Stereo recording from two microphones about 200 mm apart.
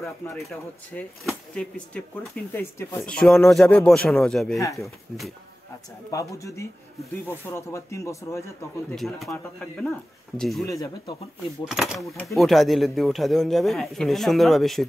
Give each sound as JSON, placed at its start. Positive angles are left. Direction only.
{"t": 0.0, "sound": "speech", "side_deg": 0}
{"t": 6.0, "sound": "speech", "side_deg": 15}
{"t": 8.9, "sound": "speech", "side_deg": 0}
{"t": 10.6, "sound": "speech", "side_deg": 15}
{"t": 11.7, "sound": "speech", "side_deg": 0}